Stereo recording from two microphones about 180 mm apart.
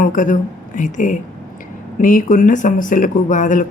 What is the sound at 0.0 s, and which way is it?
Speech, 45° left (ahead or behind).